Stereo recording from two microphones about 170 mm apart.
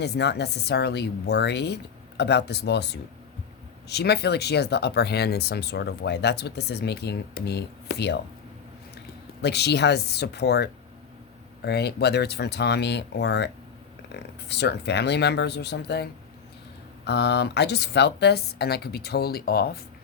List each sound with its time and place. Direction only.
0.0 s speech: 75° left (ahead or behind)
9.4 s speech: 75° left (ahead or behind)
14.1 s speech: 80° left
17.1 s speech: 80° left; by 19.8 s 65° left (ahead or behind)